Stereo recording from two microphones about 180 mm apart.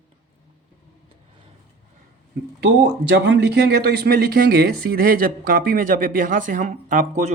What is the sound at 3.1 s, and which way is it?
Speech, 75° right (ahead or behind).